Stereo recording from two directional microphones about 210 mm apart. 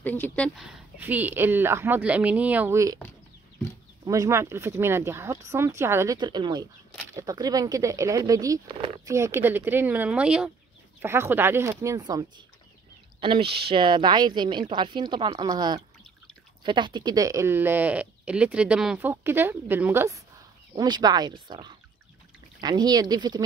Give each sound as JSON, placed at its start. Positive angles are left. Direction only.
{"t": 0.0, "sound": "speech", "side_deg": 10}
{"t": 4.0, "sound": "a woman's voice", "side_deg": -15}